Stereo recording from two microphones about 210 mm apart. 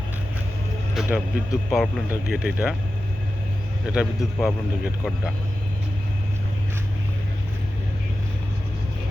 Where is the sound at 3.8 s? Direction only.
Centre (ahead or behind).